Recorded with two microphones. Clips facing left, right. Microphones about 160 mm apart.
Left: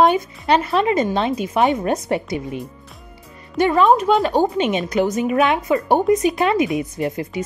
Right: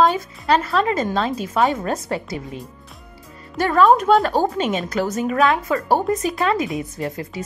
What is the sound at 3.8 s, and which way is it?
Speech, centre (ahead or behind).